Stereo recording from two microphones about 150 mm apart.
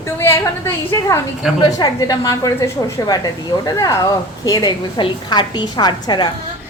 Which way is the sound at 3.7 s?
25° left (ahead or behind).